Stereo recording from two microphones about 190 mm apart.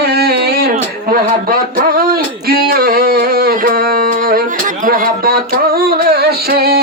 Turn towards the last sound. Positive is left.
turn(degrees=-55)  # may be behind; listen again after turning